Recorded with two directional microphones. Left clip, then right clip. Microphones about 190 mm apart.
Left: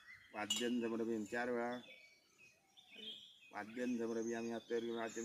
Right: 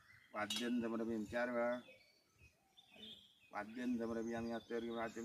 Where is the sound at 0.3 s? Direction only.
30° right (ahead or behind).